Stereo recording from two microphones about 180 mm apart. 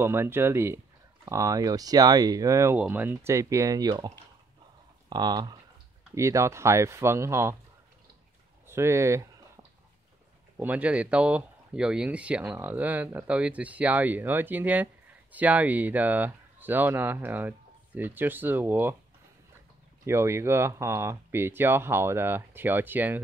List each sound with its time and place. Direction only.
0.0 s speech: 15° right (ahead or behind)
5.1 s speech: 25° right (ahead or behind)
8.6 s speech: 15° right (ahead or behind)
10.6 s speech: 10° right (ahead or behind)
20.1 s speech: 15° right (ahead or behind)